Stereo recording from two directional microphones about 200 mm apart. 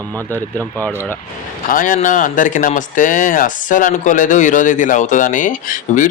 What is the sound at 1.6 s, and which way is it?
Speech, 40° left (ahead or behind).